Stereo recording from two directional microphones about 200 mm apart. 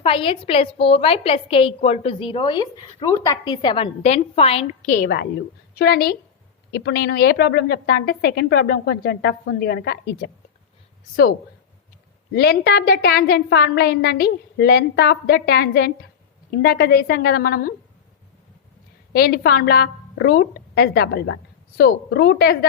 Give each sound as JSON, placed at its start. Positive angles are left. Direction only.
{"t": 0.0, "sound": "a woman's voice", "side_deg": 25}
{"t": 12.3, "sound": "a woman's voice", "side_deg": 55}
{"t": 19.1, "sound": "a woman's voice", "side_deg": 55}